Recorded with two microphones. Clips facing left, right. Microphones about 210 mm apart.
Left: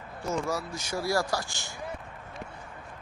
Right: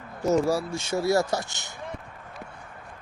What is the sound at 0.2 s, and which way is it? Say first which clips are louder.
Speech: right 8 dB; 40° right (ahead or behind).